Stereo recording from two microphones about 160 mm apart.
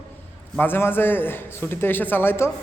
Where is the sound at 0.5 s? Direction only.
10° left (ahead or behind).